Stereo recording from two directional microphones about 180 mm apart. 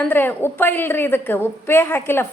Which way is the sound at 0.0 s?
10° left (ahead or behind).